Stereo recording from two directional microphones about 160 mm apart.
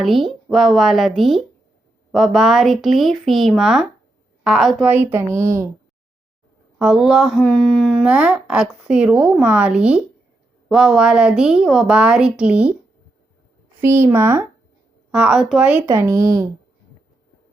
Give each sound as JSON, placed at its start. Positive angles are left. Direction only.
{"t": 0.0, "sound": "a woman's voice", "side_deg": 0}
{"t": 4.9, "sound": "speech", "side_deg": -10}
{"t": 6.7, "sound": "a woman's voice", "side_deg": -5}
{"t": 8.0, "sound": "a woman's voice", "side_deg": -5}
{"t": 13.8, "sound": "speech", "side_deg": -15}